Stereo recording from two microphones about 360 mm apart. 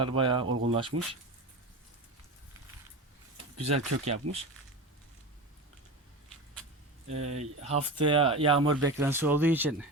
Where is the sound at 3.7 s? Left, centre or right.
Centre.